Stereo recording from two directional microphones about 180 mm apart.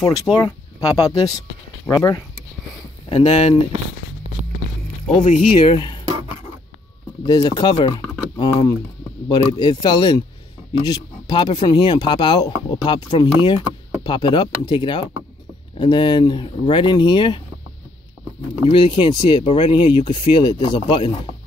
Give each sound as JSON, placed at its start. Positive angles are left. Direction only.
{"t": 0.0, "sound": "speech", "side_deg": 20}
{"t": 3.1, "sound": "speech", "side_deg": 35}
{"t": 5.2, "sound": "speech", "side_deg": 40}
{"t": 5.8, "sound": "a sound", "side_deg": 25}
{"t": 7.2, "sound": "speech", "side_deg": 25}
{"t": 18.7, "sound": "speech", "side_deg": 30}